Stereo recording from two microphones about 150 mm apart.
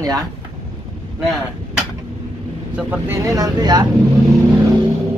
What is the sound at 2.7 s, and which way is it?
Speech, 15° right (ahead or behind).